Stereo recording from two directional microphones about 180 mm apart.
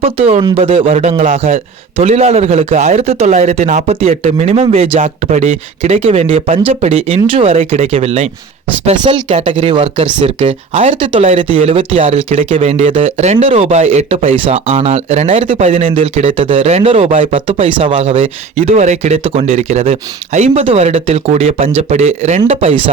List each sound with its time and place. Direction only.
0.0 s speech: 30° right (ahead or behind)